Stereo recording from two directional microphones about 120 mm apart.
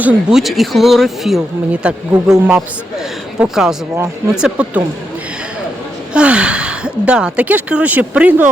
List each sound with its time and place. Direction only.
0.0 s speech: 5° right (ahead or behind)
6.1 s speech: 10° right (ahead or behind)